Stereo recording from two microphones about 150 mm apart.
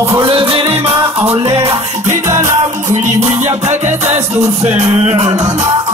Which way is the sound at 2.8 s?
55° right (ahead or behind).